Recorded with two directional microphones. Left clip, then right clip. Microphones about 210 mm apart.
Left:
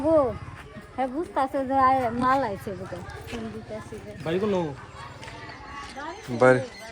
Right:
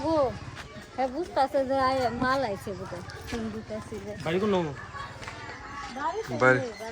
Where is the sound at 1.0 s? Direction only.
50° left (ahead or behind).